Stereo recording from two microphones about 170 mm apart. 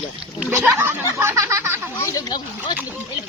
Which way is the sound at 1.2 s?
15° right (ahead or behind).